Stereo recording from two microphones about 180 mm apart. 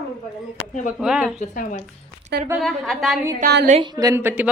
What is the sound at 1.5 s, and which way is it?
Speech, 50° left (ahead or behind).